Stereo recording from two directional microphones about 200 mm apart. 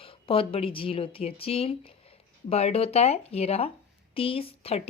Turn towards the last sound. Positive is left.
turn(degrees=30)  # may be behind; listen again after turning